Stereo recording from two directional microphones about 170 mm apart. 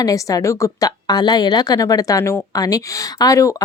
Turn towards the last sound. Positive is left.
turn(degrees=20)  # may be behind; listen again after turning